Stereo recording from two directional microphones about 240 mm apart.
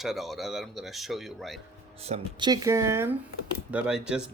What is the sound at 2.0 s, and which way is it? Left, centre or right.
Speech, right.